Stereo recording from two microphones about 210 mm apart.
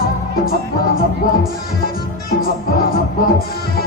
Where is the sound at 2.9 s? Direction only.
45° left (ahead or behind).